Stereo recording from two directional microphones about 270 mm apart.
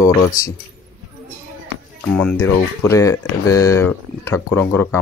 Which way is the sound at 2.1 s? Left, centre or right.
Centre.